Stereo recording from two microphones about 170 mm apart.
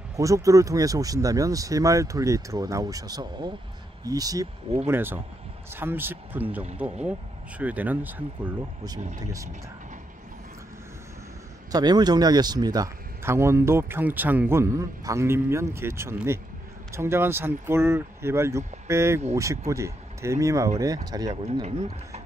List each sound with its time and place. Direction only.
0.1 s speech: 20° right (ahead or behind)
11.7 s speech: 25° right (ahead or behind)
21.5 s speech: 40° right (ahead or behind)